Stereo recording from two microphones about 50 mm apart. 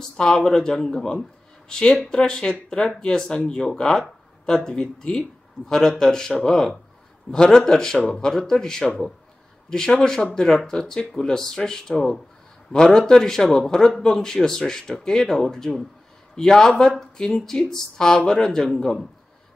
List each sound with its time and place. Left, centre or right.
0.2 s a man's voice: centre